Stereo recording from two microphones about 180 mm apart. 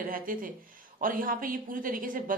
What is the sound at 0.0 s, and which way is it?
Speech, 50° right (ahead or behind).